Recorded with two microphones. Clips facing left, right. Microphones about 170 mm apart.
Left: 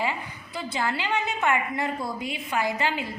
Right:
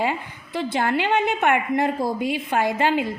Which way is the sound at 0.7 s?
55° right (ahead or behind).